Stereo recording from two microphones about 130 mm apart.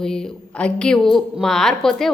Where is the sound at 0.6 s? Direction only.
5° left (ahead or behind).